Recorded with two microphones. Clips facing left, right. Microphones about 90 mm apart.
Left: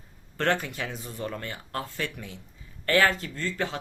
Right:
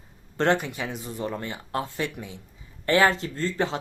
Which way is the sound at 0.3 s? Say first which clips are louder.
Right 3 dB; 20° right (ahead or behind).